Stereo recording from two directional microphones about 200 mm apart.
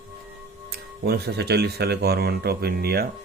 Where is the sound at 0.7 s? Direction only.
55° right (ahead or behind).